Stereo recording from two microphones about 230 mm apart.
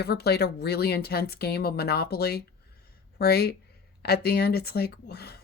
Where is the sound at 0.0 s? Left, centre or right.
Left.